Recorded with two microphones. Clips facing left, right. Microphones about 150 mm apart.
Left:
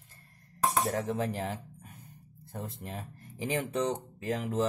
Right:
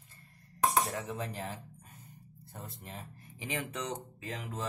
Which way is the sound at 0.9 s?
50° left (ahead or behind).